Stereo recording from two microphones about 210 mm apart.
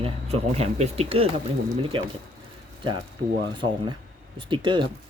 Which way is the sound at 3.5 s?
20° right (ahead or behind).